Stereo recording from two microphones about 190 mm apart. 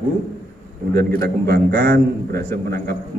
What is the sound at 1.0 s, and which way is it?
A man's voice, 55° right (ahead or behind).